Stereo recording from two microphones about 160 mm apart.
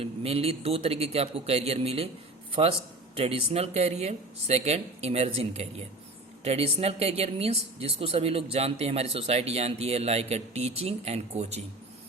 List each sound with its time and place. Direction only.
0.0 s a woman's voice: 40° right (ahead or behind)